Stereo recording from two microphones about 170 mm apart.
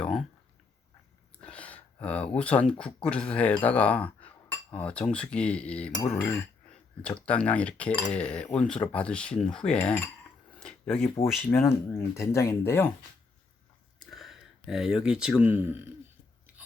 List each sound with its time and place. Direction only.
0.0 s a sound: 5° left (ahead or behind)
1.4 s speech: 5° left (ahead or behind)
7.0 s speech: 10° left (ahead or behind)
14.0 s speech: centre (ahead or behind)